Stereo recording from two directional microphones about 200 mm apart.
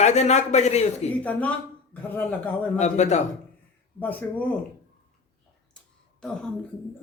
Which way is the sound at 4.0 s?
10° left (ahead or behind).